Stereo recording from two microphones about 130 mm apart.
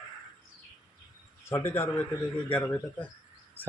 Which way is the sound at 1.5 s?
20° left (ahead or behind).